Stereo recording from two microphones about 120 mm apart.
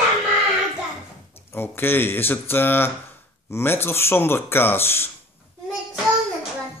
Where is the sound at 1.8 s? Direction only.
20° left (ahead or behind).